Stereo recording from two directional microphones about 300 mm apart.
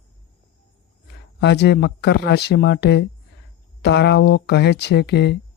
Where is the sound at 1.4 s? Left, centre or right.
Left.